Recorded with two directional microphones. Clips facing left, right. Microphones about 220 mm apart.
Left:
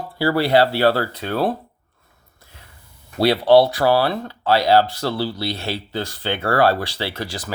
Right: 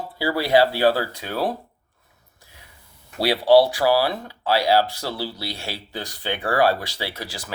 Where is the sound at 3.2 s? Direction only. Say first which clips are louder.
Left 2 dB; 10° right (ahead or behind).